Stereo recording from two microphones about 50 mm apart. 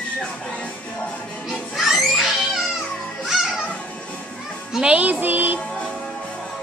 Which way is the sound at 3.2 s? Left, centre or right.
Centre.